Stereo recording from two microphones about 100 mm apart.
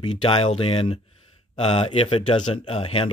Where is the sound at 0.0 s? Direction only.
60° left (ahead or behind).